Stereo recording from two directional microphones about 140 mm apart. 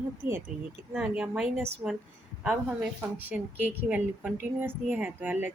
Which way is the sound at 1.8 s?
15° right (ahead or behind).